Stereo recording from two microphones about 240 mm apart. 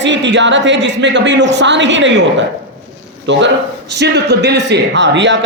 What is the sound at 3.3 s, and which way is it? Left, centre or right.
Speech, right.